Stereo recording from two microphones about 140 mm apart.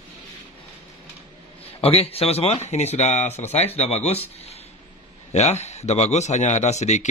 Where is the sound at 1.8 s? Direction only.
45° left (ahead or behind).